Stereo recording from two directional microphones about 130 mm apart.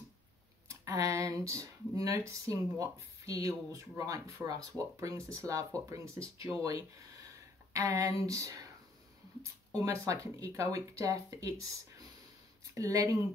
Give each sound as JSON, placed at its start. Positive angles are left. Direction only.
{"t": 0.7, "sound": "speech", "side_deg": -25}
{"t": 9.8, "sound": "speech", "side_deg": -25}